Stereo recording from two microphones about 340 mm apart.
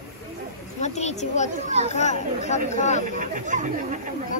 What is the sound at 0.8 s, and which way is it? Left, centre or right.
Speech, centre.